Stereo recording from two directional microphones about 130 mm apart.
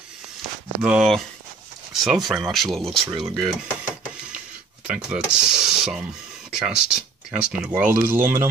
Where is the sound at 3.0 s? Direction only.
40° right (ahead or behind).